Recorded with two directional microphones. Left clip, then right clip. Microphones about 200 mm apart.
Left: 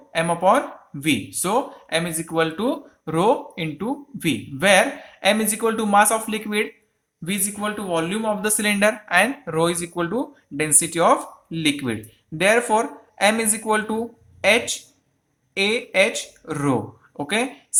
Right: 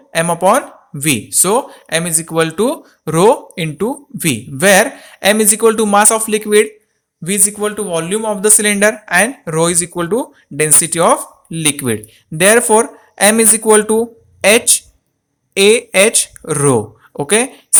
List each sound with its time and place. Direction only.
0.1 s speech: 45° right (ahead or behind)